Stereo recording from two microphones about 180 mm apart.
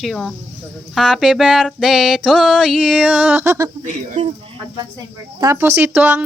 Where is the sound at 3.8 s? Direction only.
40° right (ahead or behind).